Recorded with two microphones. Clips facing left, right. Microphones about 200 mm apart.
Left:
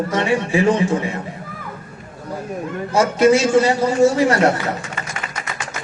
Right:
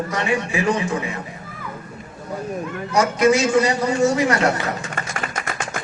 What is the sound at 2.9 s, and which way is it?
A man's voice, 30° left (ahead or behind).